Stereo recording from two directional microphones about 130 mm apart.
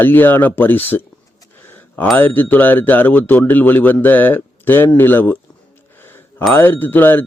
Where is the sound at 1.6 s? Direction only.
15° left (ahead or behind).